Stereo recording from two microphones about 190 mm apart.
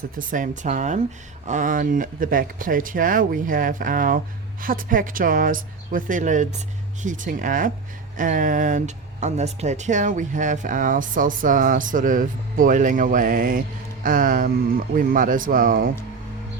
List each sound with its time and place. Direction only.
0.2 s speech: 45° right (ahead or behind)